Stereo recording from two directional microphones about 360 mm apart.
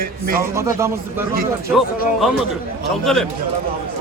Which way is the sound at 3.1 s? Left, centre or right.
Centre.